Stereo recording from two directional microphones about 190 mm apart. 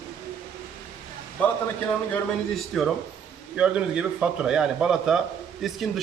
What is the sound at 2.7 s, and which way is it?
Speech, centre (ahead or behind).